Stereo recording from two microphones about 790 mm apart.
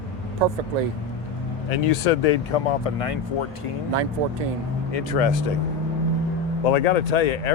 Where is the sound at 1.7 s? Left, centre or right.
Left.